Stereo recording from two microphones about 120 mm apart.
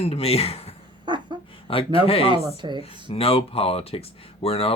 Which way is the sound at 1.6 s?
50° left (ahead or behind).